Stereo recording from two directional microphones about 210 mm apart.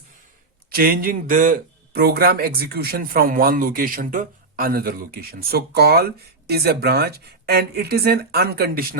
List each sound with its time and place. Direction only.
0.7 s speech: 45° right (ahead or behind)